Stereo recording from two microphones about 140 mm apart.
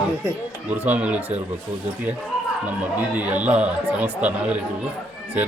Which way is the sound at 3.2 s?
10° right (ahead or behind).